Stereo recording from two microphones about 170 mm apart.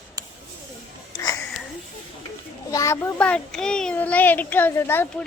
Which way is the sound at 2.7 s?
15° left (ahead or behind).